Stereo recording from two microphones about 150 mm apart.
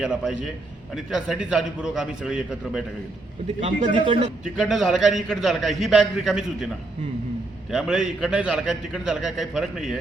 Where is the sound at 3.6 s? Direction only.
45° right (ahead or behind).